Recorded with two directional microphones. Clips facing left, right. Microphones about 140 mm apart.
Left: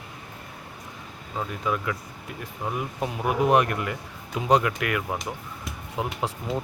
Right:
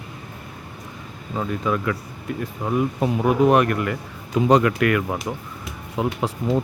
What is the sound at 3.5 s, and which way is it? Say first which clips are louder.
Speech: right 3 dB; 20° left (ahead or behind).